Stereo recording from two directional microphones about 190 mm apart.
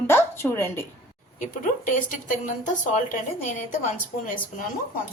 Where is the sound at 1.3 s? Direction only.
40° left (ahead or behind).